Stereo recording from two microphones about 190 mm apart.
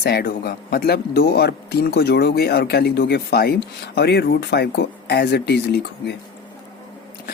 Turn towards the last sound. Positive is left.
turn(degrees=60)  # may be behind; listen again after turning